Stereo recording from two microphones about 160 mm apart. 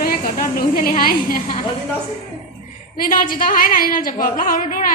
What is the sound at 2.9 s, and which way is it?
Music, 60° left (ahead or behind).